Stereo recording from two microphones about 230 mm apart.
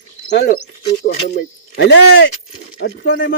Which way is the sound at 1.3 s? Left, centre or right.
Left.